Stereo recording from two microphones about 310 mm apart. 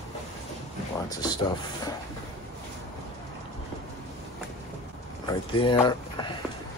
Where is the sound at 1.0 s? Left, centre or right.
Centre.